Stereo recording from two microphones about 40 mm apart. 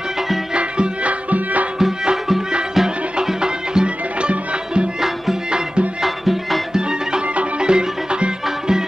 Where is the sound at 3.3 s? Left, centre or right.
Right.